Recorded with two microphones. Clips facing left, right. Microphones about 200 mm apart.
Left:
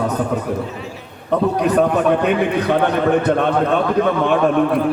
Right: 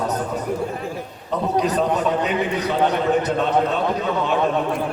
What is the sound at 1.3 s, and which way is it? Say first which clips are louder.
A man's voice: left 5 dB; 60° left (ahead or behind).